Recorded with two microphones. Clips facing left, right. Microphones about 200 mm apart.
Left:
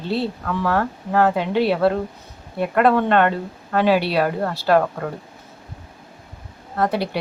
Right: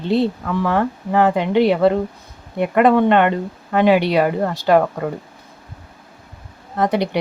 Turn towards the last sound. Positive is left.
turn(degrees=-20)  # may be behind; listen again after turning